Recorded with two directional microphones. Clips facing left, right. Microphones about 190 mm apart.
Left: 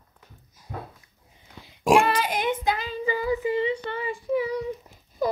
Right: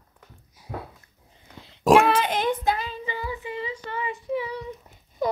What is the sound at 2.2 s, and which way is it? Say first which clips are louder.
Child singing: right 1 dB; 10° left (ahead or behind).